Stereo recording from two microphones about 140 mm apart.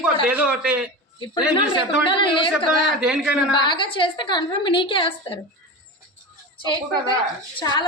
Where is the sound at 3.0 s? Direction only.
5° right (ahead or behind).